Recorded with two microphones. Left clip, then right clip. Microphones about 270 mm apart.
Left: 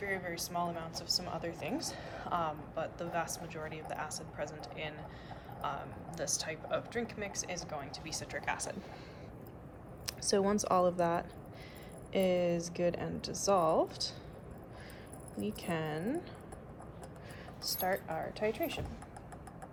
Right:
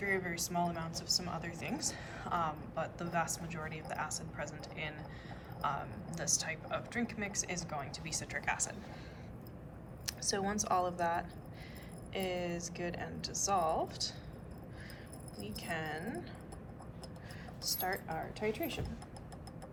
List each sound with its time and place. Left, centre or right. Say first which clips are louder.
0.0 s speech: right 2 dB; centre
10.1 s speech: left 5 dB; left
15.4 s speech: left 2 dB; left
17.6 s a woman's voice: left 3 dB; left